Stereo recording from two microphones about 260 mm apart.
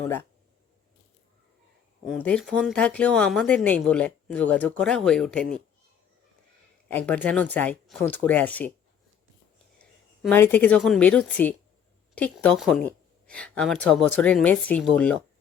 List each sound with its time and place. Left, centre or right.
2.0 s speech: centre
6.8 s speech: centre
10.2 s speech: centre